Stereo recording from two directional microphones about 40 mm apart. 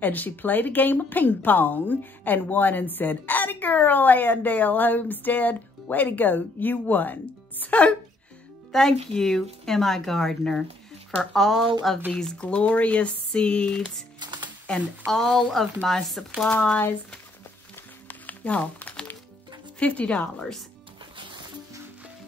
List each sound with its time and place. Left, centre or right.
0.0 s a woman's voice: left
7.6 s speech: left
8.7 s speech: centre
12.1 s speech: centre
12.4 s speech: left
15.0 s speech: centre
18.4 s speech: left
20.1 s speech: left